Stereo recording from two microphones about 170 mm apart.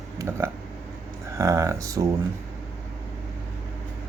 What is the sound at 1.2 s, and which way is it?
Speech, 15° right (ahead or behind).